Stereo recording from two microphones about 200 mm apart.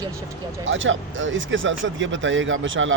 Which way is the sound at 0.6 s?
70° right (ahead or behind).